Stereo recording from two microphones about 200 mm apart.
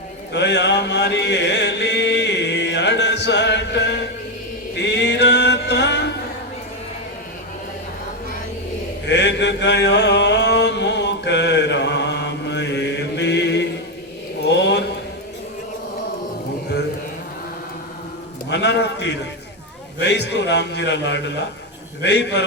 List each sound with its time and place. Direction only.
0.3 s chant: 60° left (ahead or behind)
4.8 s music: 55° left (ahead or behind)
9.0 s chant: 60° left (ahead or behind)
14.5 s a sound: 60° left (ahead or behind)
18.4 s a sound: 60° left (ahead or behind)
20.0 s a man's voice: 60° left (ahead or behind)